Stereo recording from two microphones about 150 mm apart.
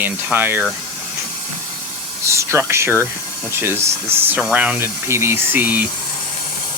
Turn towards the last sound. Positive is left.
turn(degrees=-10)  # may be behind; listen again after turning